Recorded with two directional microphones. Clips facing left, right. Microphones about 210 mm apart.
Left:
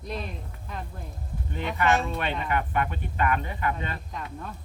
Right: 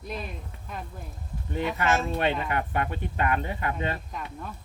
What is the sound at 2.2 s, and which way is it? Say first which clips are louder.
Speech: right 2 dB; 40° right (ahead or behind).